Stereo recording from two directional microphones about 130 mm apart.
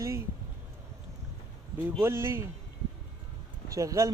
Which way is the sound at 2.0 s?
20° right (ahead or behind).